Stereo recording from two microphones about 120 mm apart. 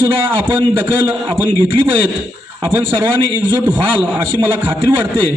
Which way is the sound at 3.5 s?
15° right (ahead or behind).